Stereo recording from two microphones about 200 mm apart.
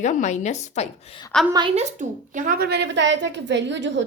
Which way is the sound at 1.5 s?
30° right (ahead or behind).